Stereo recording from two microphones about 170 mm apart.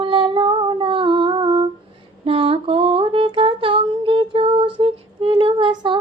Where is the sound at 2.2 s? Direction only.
35° right (ahead or behind).